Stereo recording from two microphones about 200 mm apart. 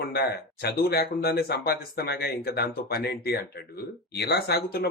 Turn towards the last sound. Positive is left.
turn(degrees=55)  # may be behind; listen again after turning